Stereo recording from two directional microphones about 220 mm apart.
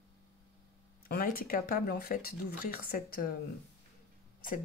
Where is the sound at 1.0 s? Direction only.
40° left (ahead or behind).